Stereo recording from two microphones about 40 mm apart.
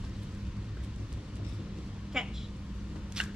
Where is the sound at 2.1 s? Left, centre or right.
Centre.